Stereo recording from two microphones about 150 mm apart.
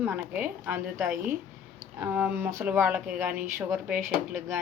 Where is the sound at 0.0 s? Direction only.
10° right (ahead or behind).